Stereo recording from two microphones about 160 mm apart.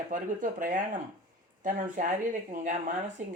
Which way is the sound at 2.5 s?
55° right (ahead or behind).